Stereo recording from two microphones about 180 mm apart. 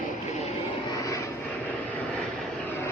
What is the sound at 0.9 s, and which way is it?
Vehicle, 20° left (ahead or behind).